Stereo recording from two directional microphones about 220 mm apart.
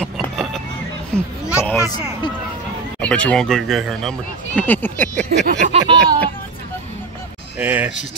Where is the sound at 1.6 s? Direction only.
10° left (ahead or behind).